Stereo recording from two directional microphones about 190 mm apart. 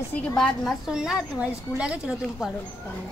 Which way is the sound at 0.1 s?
5° left (ahead or behind).